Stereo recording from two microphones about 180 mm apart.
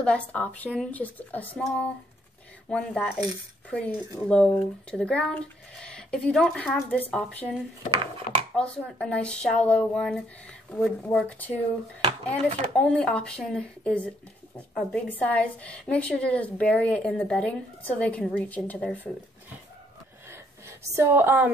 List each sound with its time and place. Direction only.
0.0 s a woman's voice: 5° left (ahead or behind)
7.9 s speech: 30° right (ahead or behind)
8.5 s a woman's voice: 5° left (ahead or behind)
12.0 s speech: 35° right (ahead or behind)
12.7 s a woman's voice: 5° left (ahead or behind)
20.2 s a sound: 15° right (ahead or behind)